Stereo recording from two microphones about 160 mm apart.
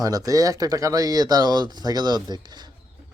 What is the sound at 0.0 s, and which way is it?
Speech, 20° right (ahead or behind).